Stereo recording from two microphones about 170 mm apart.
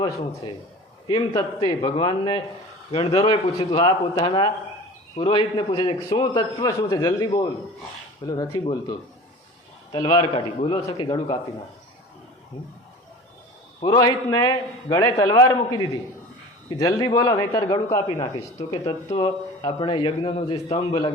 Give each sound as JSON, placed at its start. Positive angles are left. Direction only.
{"t": 0.0, "sound": "a man's voice", "side_deg": 25}
{"t": 13.8, "sound": "a man's voice", "side_deg": 20}
{"t": 19.1, "sound": "a man's voice", "side_deg": 30}